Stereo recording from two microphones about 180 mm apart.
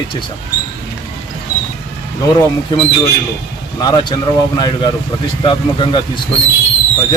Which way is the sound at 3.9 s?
25° left (ahead or behind).